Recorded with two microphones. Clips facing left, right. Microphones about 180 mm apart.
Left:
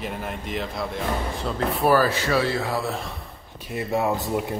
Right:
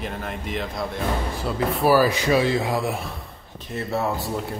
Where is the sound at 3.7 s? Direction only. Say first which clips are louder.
Left 1 dB; 15° left (ahead or behind).